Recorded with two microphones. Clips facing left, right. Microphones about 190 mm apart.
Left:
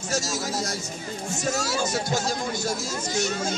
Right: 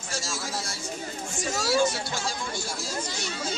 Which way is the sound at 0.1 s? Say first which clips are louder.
Left 6 dB; 40° left (ahead or behind).